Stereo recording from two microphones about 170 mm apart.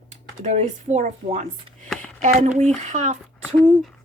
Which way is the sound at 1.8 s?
10° left (ahead or behind).